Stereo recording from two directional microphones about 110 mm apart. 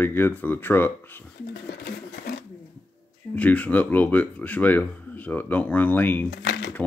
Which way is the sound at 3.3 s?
15° left (ahead or behind).